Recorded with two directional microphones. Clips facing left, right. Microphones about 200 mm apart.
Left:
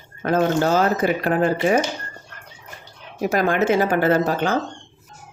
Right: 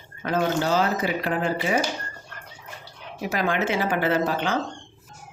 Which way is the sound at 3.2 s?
45° left (ahead or behind).